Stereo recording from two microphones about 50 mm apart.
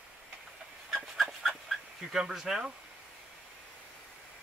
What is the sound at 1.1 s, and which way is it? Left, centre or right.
Dog, centre.